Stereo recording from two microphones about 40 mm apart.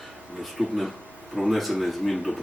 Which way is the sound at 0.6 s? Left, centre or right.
Centre.